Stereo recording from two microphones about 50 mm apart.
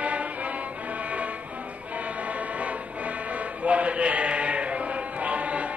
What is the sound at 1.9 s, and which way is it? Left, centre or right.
Vehicle, right.